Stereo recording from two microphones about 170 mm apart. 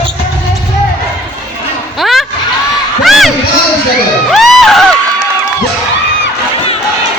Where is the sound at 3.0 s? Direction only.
Centre (ahead or behind).